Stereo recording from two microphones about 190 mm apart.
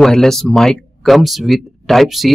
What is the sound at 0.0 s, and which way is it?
Speech, centre (ahead or behind).